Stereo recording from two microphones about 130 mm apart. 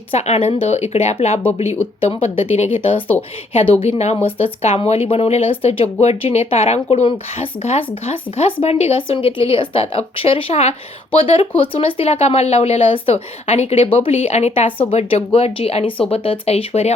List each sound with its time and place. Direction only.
0.1 s a woman's voice: 50° left (ahead or behind)